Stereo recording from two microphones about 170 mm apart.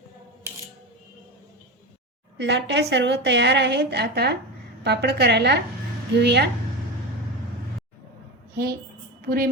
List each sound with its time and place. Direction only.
2.4 s a woman's voice: 90° right
9.2 s a woman's voice: 65° right (ahead or behind)